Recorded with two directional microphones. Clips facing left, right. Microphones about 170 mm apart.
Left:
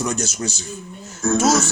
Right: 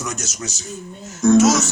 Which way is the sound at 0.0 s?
30° left (ahead or behind).